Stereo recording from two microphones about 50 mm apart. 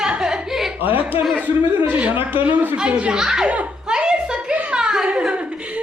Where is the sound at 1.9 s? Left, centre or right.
Right.